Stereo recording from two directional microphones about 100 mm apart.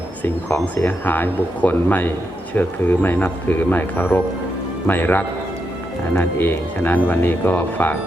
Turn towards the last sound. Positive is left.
turn(degrees=20)  # may be behind; listen again after turning